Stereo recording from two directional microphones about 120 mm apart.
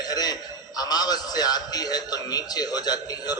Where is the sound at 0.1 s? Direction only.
35° left (ahead or behind).